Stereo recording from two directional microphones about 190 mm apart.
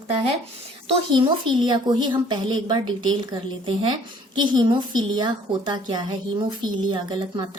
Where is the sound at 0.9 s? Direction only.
25° right (ahead or behind).